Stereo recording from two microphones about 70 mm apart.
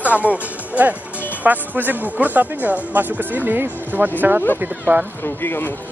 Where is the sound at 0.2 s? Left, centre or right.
Right.